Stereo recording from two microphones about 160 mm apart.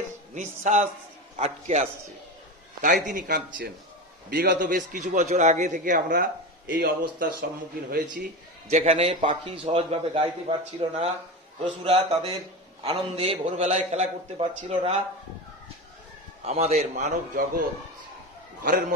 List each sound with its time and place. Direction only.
0.3 s a man's voice: 50° right (ahead or behind); by 7.2 s 65° right (ahead or behind)
8.6 s a man's voice: 45° right (ahead or behind)
16.4 s a man's voice: 45° right (ahead or behind)
18.6 s a man's voice: 60° right (ahead or behind)